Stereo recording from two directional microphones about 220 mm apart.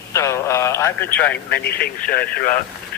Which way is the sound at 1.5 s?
45° left (ahead or behind).